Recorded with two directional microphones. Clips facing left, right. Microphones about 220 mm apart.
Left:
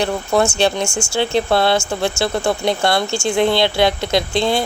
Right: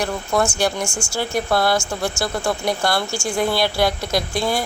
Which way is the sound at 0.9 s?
10° left (ahead or behind).